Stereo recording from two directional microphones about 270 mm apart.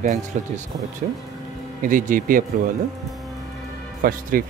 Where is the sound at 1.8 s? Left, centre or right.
Right.